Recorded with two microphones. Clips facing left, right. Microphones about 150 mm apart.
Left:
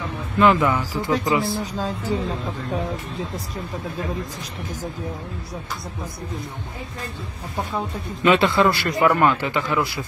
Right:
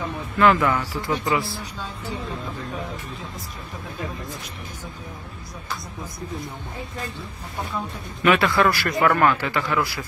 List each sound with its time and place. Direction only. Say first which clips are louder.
0.4 s speech: left 1 dB; 20° left (ahead or behind)
8.2 s speech: left 2 dB; 20° left (ahead or behind)